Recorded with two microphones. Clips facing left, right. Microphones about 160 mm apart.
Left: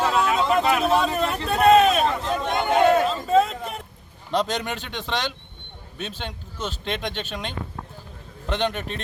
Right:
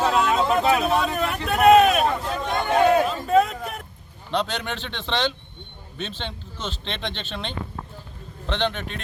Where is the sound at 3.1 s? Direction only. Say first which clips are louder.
Even; 25° left (ahead or behind).